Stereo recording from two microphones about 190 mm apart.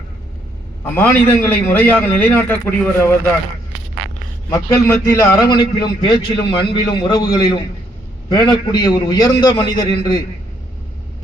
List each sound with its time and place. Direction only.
0.9 s a man's voice: 10° left (ahead or behind)
4.4 s a man's voice: 15° left (ahead or behind)